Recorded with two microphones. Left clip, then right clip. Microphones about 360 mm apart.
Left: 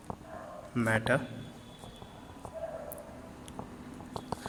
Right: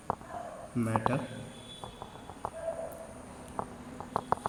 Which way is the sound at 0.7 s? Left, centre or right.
Left.